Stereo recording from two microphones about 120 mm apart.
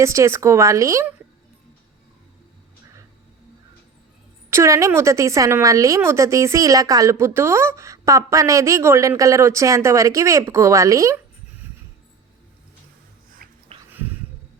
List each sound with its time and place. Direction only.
0.0 s a woman's voice: 25° right (ahead or behind)
4.5 s a woman's voice: 25° right (ahead or behind)
13.7 s a sound: 55° right (ahead or behind)